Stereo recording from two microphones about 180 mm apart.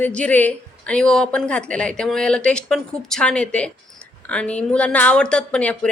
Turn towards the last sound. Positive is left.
turn(degrees=5)  # may be behind; listen again after turning